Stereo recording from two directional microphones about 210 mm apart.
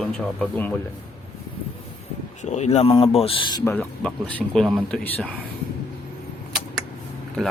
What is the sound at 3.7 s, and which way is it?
Speech, 5° left (ahead or behind).